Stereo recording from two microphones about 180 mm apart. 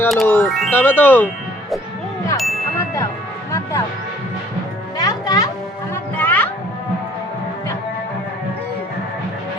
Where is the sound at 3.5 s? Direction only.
15° left (ahead or behind).